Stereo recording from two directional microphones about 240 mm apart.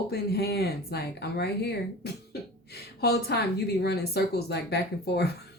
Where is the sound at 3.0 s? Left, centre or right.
Left.